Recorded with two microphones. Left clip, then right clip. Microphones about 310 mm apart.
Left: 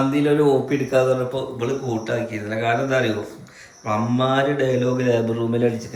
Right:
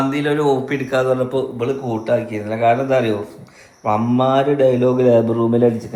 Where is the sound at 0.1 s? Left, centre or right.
Centre.